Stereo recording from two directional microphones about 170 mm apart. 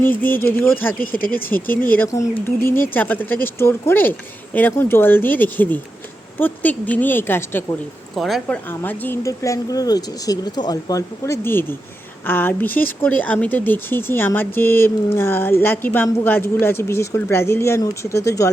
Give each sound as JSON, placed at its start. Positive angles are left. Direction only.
{"t": 0.0, "sound": "speech", "side_deg": 10}
{"t": 8.1, "sound": "a woman's voice", "side_deg": 0}
{"t": 8.8, "sound": "speech", "side_deg": 10}